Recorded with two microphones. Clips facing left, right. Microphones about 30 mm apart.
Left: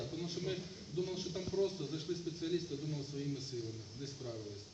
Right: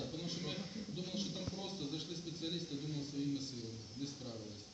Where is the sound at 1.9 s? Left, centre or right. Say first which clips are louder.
Left 4 dB; right.